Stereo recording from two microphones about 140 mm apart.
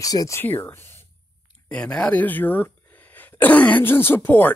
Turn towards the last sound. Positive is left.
turn(degrees=10)  # may be behind; listen again after turning